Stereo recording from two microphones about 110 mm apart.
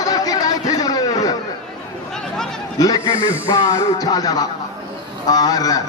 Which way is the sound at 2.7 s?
35° left (ahead or behind).